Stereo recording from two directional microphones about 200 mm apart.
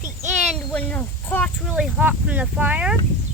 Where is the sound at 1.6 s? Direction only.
5° right (ahead or behind).